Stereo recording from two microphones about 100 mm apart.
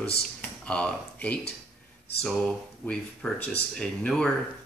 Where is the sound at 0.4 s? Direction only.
10° left (ahead or behind).